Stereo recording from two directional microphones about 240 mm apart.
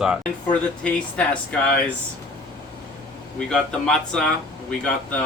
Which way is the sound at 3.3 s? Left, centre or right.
Centre.